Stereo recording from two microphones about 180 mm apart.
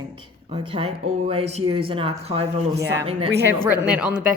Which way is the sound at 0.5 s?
30° right (ahead or behind).